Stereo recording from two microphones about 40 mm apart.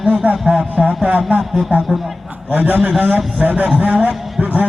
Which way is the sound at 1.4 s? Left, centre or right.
Centre.